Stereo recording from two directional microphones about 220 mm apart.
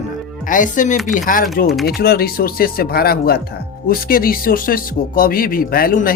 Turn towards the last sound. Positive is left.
turn(degrees=40)  # may be behind; listen again after turning